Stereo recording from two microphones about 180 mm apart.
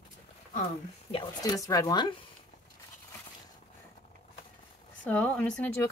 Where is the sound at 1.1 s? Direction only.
20° left (ahead or behind).